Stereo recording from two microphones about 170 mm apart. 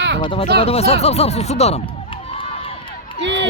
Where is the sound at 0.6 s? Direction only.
35° left (ahead or behind).